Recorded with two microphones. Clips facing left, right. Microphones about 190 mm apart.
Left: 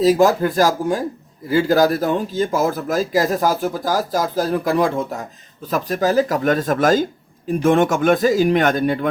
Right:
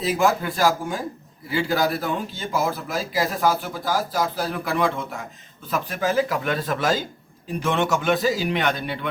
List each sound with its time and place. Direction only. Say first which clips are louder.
0.0 s a man's voice: left 7 dB; 40° left (ahead or behind)